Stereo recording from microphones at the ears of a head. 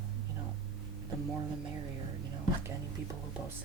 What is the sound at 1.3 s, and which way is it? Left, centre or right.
Speech, right.